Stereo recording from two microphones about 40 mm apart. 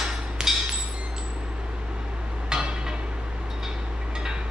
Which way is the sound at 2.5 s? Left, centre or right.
Centre.